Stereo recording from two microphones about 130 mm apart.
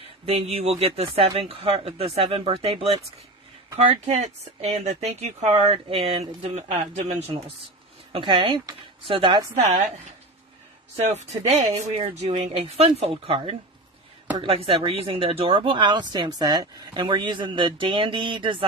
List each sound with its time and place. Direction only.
0.2 s speech: 50° right (ahead or behind)
8.1 s speech: 40° right (ahead or behind)
9.6 s speech: 60° right (ahead or behind)
11.1 s speech: 60° right (ahead or behind); by 18.7 s 40° right (ahead or behind)